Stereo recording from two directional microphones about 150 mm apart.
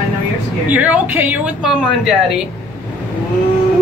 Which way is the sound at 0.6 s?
10° right (ahead or behind).